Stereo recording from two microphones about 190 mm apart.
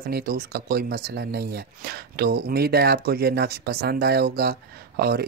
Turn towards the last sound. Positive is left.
turn(degrees=-55)  # may be behind; listen again after turning